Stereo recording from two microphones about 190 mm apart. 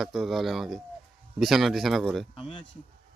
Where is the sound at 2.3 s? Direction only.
25° left (ahead or behind).